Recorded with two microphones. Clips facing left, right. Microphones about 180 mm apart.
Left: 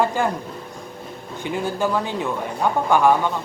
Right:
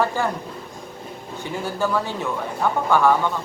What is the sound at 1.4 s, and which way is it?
A woman's voice, 15° left (ahead or behind).